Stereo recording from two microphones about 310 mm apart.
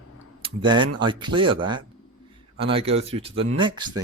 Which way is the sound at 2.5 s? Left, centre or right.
Centre.